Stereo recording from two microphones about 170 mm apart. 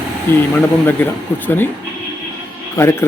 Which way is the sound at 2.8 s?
15° left (ahead or behind).